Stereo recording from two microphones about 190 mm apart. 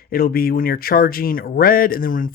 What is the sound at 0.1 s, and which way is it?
Speech, 50° left (ahead or behind).